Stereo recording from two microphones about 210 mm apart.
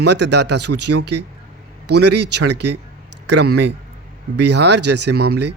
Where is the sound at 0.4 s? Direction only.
90° right.